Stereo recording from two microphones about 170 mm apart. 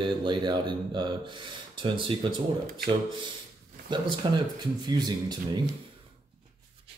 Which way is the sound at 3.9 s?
25° right (ahead or behind).